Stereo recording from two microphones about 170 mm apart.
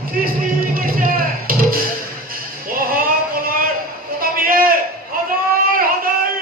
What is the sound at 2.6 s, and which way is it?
Child singing, 60° right (ahead or behind).